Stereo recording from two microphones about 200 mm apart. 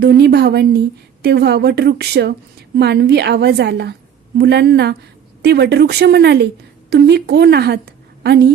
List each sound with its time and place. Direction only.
0.0 s a woman's voice: 55° right (ahead or behind)